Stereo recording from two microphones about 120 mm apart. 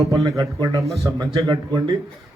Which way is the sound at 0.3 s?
30° right (ahead or behind).